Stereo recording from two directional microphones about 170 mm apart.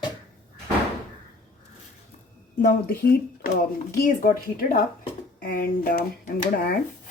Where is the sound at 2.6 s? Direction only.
60° left (ahead or behind).